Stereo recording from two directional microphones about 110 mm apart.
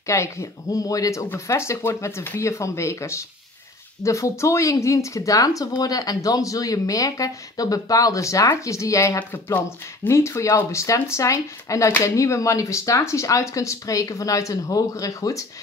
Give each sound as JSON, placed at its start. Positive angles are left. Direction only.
{"t": 0.0, "sound": "speech", "side_deg": 25}